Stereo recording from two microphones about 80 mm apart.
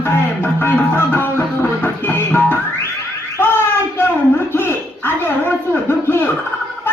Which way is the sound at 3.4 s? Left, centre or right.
Left.